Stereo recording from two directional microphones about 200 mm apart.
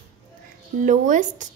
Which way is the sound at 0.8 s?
40° right (ahead or behind).